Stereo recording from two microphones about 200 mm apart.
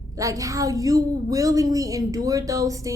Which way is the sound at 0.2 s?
15° right (ahead or behind).